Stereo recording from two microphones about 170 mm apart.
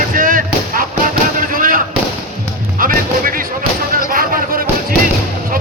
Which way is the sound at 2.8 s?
55° right (ahead or behind).